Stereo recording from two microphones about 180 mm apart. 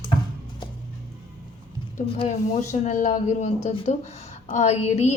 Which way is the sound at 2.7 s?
45° left (ahead or behind).